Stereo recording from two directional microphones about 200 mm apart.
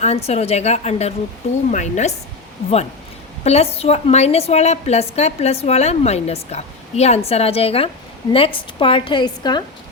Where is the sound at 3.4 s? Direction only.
30° left (ahead or behind).